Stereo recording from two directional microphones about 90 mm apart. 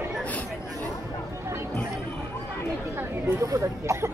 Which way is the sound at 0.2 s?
15° left (ahead or behind).